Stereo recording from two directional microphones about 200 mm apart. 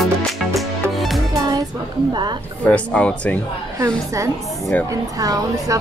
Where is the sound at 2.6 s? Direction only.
5° left (ahead or behind).